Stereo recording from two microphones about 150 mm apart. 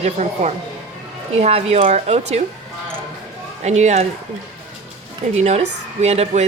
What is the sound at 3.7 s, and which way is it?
Speech, 50° right (ahead or behind).